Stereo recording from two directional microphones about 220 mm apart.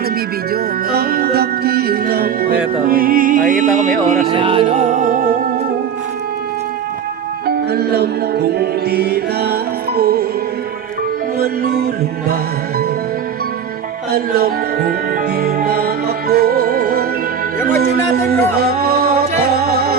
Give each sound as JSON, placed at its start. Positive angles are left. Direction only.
{"t": 0.5, "sound": "music", "side_deg": -45}
{"t": 4.3, "sound": "music", "side_deg": -25}
{"t": 7.4, "sound": "music", "side_deg": -45}
{"t": 11.3, "sound": "music", "side_deg": -45}
{"t": 14.1, "sound": "music", "side_deg": -45}
{"t": 18.5, "sound": "music", "side_deg": -45}